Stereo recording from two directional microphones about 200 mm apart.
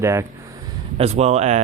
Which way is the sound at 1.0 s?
30° right (ahead or behind).